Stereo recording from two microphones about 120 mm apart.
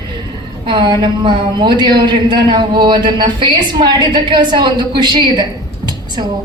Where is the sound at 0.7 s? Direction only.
40° right (ahead or behind).